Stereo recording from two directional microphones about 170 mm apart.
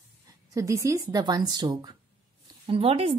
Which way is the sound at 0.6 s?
20° right (ahead or behind).